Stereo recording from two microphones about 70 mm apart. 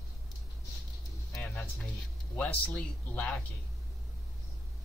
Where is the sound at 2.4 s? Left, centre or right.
Left.